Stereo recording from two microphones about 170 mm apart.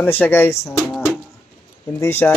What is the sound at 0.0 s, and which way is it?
Speech, 10° left (ahead or behind).